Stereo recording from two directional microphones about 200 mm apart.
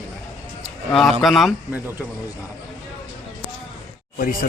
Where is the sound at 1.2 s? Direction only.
Centre (ahead or behind).